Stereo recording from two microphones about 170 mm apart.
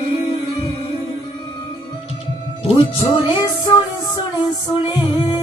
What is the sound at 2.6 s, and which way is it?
Music, 30° left (ahead or behind).